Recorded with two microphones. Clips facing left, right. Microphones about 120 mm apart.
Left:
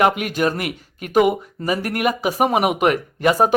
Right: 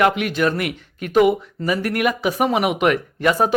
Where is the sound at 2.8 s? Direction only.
40° left (ahead or behind).